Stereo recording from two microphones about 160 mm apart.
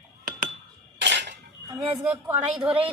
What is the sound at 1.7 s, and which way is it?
Speech, 15° right (ahead or behind).